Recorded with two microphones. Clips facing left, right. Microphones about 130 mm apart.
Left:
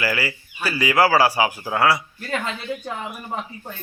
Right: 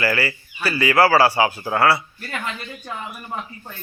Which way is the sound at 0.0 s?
15° left (ahead or behind).